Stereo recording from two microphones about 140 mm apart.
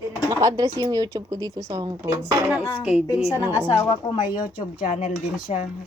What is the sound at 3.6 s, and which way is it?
Speech, 35° left (ahead or behind).